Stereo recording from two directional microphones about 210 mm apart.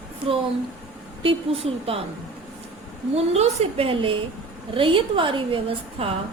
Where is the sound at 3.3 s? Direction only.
30° right (ahead or behind).